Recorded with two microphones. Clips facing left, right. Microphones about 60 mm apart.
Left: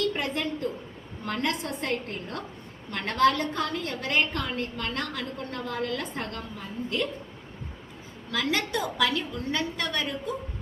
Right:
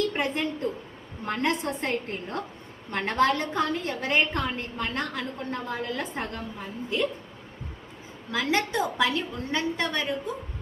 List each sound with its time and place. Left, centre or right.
0.2 s a woman's voice: right
8.3 s a woman's voice: right